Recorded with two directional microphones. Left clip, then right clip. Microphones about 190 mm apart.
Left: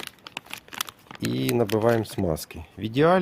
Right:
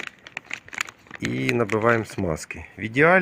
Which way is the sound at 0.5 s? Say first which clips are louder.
Right 5 dB; 30° left (ahead or behind).